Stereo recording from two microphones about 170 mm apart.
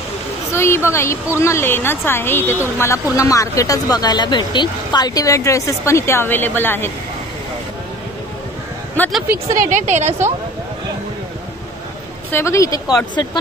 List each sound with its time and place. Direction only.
0.5 s a woman's voice: 15° left (ahead or behind)
9.0 s a woman's voice: 10° left (ahead or behind)
9.6 s a woman's voice: 50° right (ahead or behind)
12.3 s speech: 15° left (ahead or behind)